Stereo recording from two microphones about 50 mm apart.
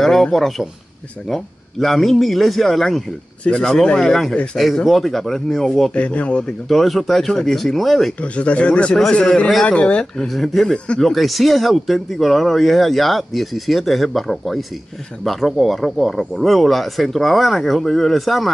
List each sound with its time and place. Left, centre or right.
0.0 s speech: centre
3.4 s speech: centre
5.9 s speech: left
6.7 s speech: centre
8.2 s speech: left
10.2 s speech: centre